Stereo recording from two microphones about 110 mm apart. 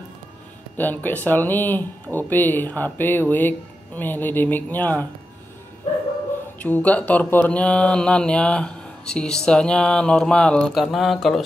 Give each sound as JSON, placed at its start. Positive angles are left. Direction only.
{"t": 0.7, "sound": "speech", "side_deg": 15}
{"t": 6.6, "sound": "speech", "side_deg": 15}